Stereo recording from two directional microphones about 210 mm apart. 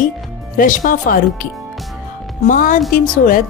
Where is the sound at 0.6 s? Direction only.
40° left (ahead or behind).